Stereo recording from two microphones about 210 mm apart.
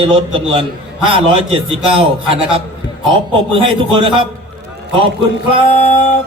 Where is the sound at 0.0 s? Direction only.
25° right (ahead or behind).